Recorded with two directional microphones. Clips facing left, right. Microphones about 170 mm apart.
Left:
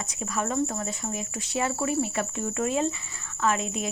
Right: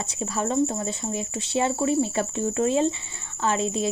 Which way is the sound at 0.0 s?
30° right (ahead or behind).